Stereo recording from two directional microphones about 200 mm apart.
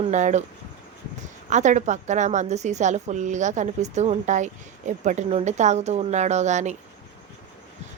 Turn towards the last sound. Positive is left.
turn(degrees=-35)  # may be behind; listen again after turning